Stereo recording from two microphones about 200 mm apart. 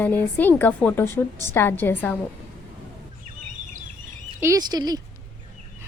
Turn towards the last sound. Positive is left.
turn(degrees=-20)  # may be behind; listen again after turning